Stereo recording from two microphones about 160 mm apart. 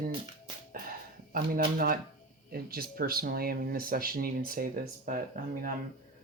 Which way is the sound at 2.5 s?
70° right (ahead or behind).